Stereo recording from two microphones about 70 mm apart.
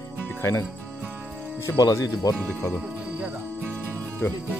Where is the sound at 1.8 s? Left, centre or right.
Left.